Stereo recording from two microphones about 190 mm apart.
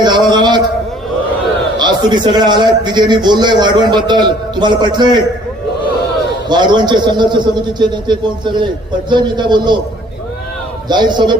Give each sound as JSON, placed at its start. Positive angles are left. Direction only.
{"t": 0.0, "sound": "a sound", "side_deg": -25}
{"t": 1.8, "sound": "a man's voice", "side_deg": -25}
{"t": 6.5, "sound": "a man's voice", "side_deg": -25}
{"t": 10.8, "sound": "a man's voice", "side_deg": -25}